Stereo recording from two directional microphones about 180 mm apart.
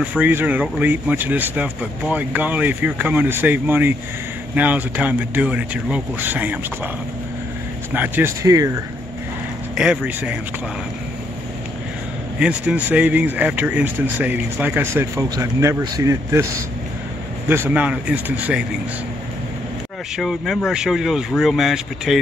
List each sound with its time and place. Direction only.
0.0 s speech: 10° right (ahead or behind)
7.9 s speech: 10° right (ahead or behind)
9.8 s speech: 5° right (ahead or behind)
12.4 s speech: 5° right (ahead or behind)
20.2 s speech: centre (ahead or behind)